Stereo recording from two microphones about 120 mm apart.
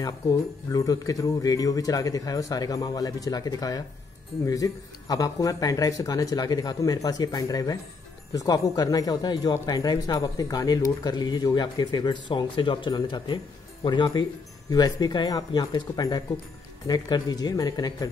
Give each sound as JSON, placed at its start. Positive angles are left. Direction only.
{"t": 0.0, "sound": "speech", "side_deg": 30}